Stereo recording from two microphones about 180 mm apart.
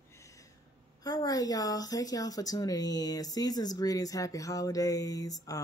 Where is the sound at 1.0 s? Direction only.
20° left (ahead or behind).